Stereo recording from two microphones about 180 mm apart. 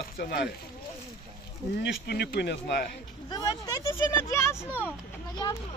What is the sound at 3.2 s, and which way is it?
Speech, 20° left (ahead or behind).